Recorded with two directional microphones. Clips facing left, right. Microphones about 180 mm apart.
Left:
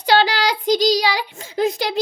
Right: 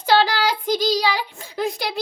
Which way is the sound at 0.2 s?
20° left (ahead or behind).